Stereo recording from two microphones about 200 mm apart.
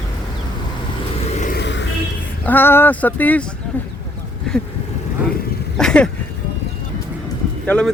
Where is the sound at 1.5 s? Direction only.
60° left (ahead or behind).